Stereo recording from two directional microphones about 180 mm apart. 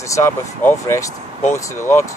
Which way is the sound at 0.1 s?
15° left (ahead or behind).